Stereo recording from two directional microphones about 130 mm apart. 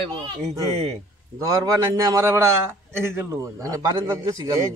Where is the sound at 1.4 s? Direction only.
25° right (ahead or behind).